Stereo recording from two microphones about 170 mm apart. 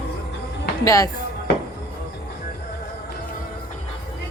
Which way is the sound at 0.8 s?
20° left (ahead or behind).